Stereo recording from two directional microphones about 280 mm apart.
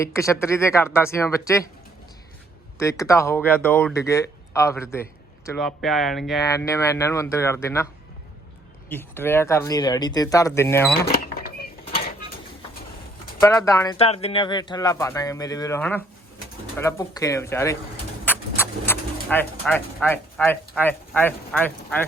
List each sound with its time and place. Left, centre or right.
0.0 s speech: centre
2.7 s speech: centre
6.4 s speech: centre
8.9 s speech: centre
11.1 s cash register: left
13.4 s speech: centre